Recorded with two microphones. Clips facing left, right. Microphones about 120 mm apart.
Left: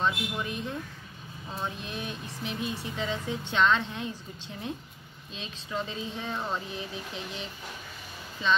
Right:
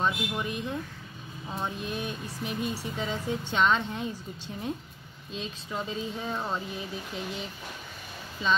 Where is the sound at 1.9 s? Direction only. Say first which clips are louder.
Right 3 dB; 45° right (ahead or behind).